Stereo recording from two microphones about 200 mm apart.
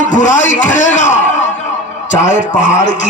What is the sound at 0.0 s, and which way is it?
Speech, 40° left (ahead or behind).